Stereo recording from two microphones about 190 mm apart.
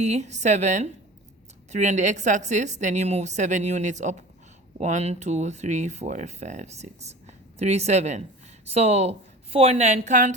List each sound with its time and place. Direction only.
0.0 s a woman's voice: 35° right (ahead or behind)